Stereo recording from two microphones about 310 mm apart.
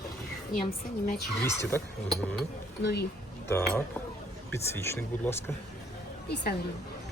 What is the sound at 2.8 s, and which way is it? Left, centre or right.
Speech, left.